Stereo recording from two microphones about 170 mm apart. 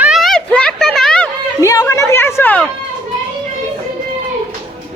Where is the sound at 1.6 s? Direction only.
20° left (ahead or behind).